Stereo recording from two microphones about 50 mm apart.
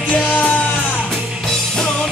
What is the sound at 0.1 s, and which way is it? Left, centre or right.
Music, left.